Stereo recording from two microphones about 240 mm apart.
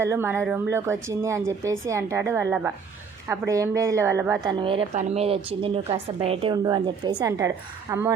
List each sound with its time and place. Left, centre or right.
0.0 s a woman's voice: centre